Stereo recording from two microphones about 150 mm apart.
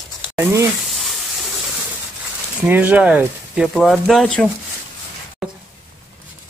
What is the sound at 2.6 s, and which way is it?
Speech, 10° right (ahead or behind).